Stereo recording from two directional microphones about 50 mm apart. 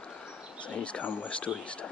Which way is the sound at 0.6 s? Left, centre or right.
Left.